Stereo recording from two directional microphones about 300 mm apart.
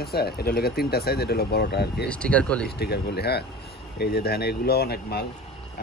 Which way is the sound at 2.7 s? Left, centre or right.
Left.